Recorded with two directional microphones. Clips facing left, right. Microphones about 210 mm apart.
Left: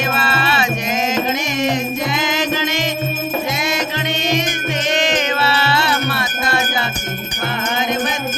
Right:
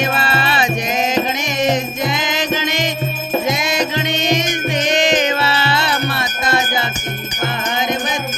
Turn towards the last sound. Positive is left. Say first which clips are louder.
# right 1 dB
turn(degrees=-20)  # may be behind; listen again after turning